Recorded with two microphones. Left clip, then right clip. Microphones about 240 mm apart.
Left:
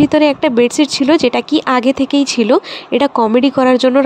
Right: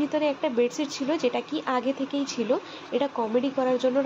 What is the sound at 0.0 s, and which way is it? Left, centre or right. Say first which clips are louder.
Speech: left 14 dB; left.